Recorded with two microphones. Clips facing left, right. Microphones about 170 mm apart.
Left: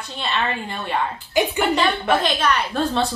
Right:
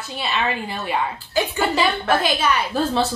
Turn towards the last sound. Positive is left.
turn(degrees=-5)  # may be behind; listen again after turning